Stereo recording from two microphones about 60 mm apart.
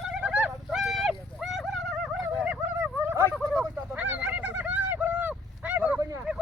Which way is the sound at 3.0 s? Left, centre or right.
Right.